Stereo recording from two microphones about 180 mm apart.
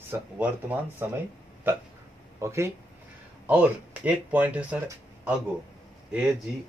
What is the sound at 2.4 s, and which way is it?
Speech, 15° right (ahead or behind).